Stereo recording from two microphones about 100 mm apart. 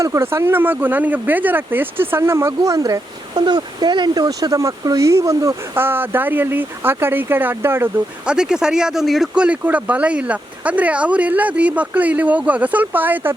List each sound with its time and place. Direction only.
0.0 s speech: 25° right (ahead or behind)
3.4 s speech: 45° right (ahead or behind); by 7.9 s 25° right (ahead or behind)
8.3 s speech: 5° right (ahead or behind)